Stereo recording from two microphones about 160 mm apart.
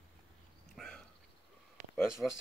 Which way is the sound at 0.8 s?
5° left (ahead or behind).